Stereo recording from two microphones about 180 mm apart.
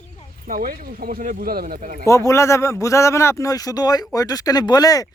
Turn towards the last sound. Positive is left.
turn(degrees=20)  # may be behind; listen again after turning